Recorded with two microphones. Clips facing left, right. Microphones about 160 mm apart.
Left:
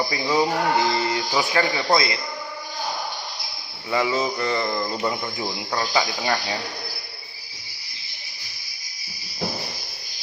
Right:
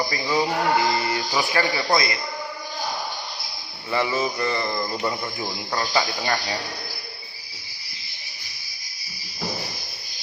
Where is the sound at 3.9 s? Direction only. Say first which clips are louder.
Left 1 dB; 15° left (ahead or behind).